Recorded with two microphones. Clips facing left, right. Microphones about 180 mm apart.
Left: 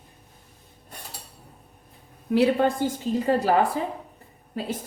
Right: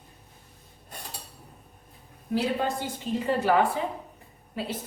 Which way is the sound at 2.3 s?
65° left (ahead or behind).